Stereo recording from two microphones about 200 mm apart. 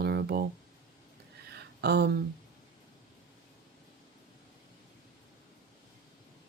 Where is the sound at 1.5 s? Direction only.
55° right (ahead or behind).